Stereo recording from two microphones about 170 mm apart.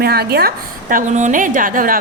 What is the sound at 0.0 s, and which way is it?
A woman's voice, 65° right (ahead or behind).